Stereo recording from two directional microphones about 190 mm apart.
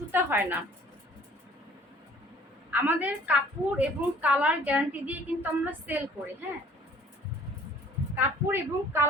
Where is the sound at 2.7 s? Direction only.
10° right (ahead or behind).